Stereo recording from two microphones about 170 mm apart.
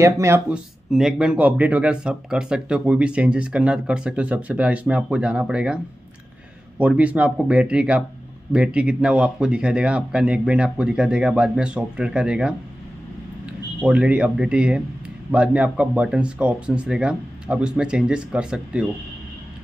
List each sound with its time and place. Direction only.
0.0 s speech: 15° right (ahead or behind)
0.5 s speech: centre (ahead or behind)
6.8 s speech: 5° right (ahead or behind)
13.7 s speech: 5° right (ahead or behind)